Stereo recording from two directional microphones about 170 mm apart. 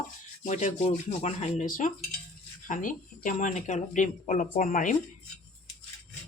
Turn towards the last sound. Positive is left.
turn(degrees=50)  # may be behind; listen again after turning